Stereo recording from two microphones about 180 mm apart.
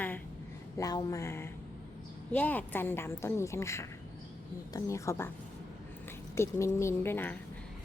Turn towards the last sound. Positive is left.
turn(degrees=10)  # may be behind; listen again after turning